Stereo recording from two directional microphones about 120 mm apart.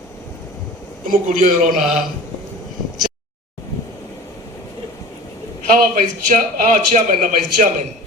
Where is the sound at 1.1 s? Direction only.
90° right.